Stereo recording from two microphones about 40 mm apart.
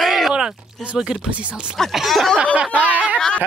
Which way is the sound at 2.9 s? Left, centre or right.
Right.